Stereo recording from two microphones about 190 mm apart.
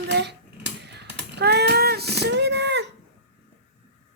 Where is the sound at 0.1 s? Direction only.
60° right (ahead or behind).